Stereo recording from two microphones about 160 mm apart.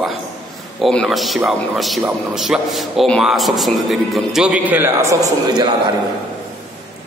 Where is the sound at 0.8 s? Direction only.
Centre (ahead or behind); by 5.9 s 25° right (ahead or behind).